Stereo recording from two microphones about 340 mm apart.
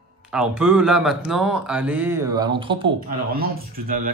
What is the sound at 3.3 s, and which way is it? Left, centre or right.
Speech, right.